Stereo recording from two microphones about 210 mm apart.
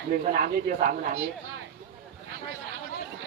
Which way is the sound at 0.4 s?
40° right (ahead or behind).